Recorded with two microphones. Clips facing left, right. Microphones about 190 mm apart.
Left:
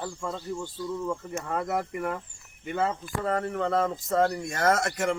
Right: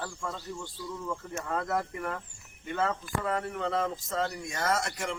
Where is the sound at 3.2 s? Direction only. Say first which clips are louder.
Left 6 dB; 45° left (ahead or behind).